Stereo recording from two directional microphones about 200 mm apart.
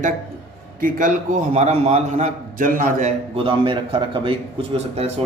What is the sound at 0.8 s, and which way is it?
A man's voice, 45° right (ahead or behind).